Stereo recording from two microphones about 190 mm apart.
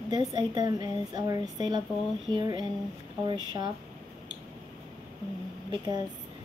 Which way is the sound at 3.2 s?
25° right (ahead or behind).